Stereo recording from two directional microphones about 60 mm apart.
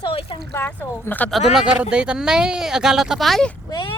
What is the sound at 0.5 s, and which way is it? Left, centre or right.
Speech, left.